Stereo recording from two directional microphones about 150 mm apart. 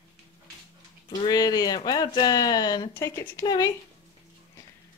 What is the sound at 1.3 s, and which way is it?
Speech, 25° left (ahead or behind).